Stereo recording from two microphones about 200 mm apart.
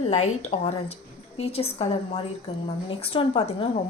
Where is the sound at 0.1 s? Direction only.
35° left (ahead or behind).